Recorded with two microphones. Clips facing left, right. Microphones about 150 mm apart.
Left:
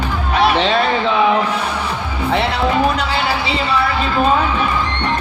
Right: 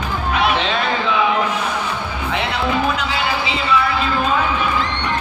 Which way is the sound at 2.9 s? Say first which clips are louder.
Left 2 dB; 35° left (ahead or behind).